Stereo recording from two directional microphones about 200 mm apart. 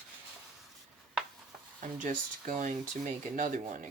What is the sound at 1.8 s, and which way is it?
Speech, 40° right (ahead or behind).